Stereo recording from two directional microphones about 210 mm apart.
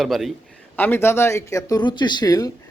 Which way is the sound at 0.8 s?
10° left (ahead or behind).